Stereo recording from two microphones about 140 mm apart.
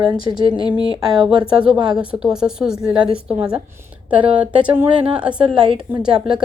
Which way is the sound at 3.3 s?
5° right (ahead or behind).